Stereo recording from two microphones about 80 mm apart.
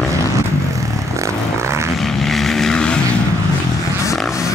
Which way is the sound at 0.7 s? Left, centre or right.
Right.